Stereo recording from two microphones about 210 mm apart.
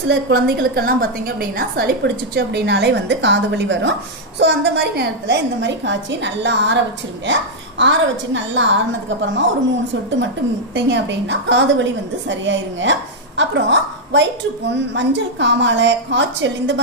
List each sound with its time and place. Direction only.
0.1 s a woman's voice: 50° right (ahead or behind)
10.7 s a woman's voice: 60° right (ahead or behind)